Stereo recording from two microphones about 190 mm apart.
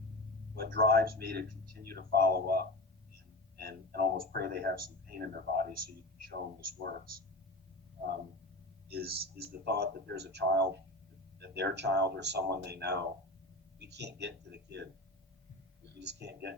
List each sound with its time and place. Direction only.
0.5 s speech: 50° right (ahead or behind)
8.9 s speech: 55° right (ahead or behind)
16.0 s speech: 65° right (ahead or behind)